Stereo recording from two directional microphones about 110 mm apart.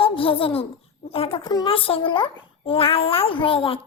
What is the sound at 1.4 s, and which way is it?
Speech, 35° left (ahead or behind).